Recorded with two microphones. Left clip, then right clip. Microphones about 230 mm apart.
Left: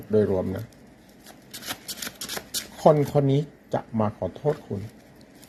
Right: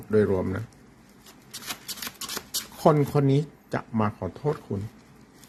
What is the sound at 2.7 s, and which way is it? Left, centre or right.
Speech, right.